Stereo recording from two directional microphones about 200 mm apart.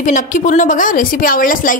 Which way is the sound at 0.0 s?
40° left (ahead or behind).